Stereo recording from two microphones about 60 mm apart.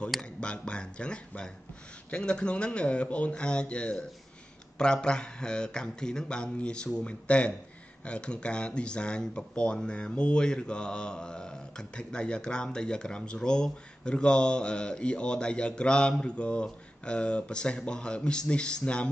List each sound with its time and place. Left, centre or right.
0.4 s speech: centre